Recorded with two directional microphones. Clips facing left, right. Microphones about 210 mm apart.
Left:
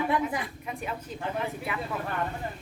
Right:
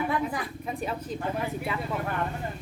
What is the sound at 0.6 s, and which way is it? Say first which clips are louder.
Speech: right 3 dB; 35° right (ahead or behind).